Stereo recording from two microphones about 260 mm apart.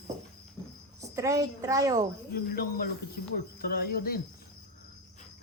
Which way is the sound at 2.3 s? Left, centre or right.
Left.